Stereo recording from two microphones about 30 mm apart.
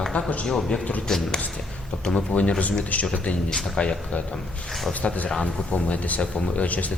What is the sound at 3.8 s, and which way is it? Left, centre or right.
Speech, left.